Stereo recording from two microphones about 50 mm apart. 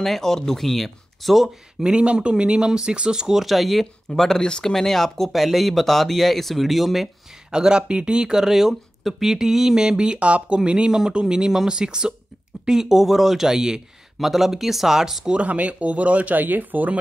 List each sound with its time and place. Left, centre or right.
0.0 s speech: centre
1.8 s speech: centre
3.4 s speech: centre
4.2 s speech: centre
7.5 s speech: centre
15.3 s speech: right